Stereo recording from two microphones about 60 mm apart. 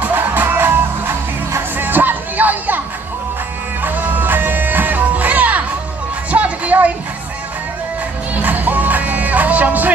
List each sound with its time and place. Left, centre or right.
0.0 s music: right
3.8 s music: right
8.4 s music: right